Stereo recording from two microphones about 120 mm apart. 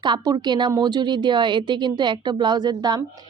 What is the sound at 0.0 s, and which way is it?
A woman's voice, 35° right (ahead or behind).